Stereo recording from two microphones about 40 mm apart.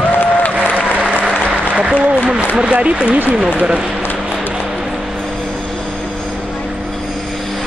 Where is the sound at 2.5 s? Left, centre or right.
Right.